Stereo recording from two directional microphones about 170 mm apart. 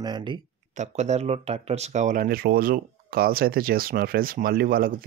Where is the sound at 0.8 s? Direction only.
40° right (ahead or behind).